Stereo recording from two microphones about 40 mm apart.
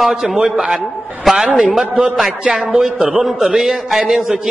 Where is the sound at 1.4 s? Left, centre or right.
Right.